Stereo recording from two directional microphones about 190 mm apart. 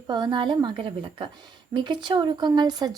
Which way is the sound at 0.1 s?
25° right (ahead or behind).